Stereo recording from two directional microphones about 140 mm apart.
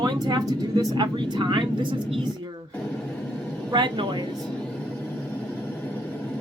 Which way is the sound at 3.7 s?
35° right (ahead or behind).